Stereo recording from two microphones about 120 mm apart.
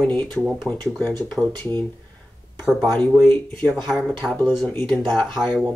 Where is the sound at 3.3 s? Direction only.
10° left (ahead or behind).